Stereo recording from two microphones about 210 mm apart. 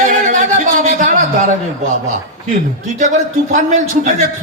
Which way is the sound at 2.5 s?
35° right (ahead or behind).